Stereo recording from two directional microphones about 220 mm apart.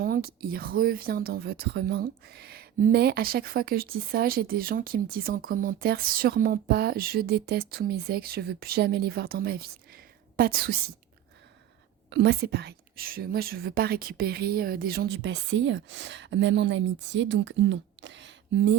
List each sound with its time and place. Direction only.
0.0 s speech: 40° right (ahead or behind)
12.1 s speech: 50° right (ahead or behind)